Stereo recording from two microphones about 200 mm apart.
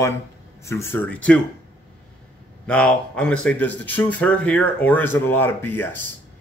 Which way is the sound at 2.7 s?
5° left (ahead or behind).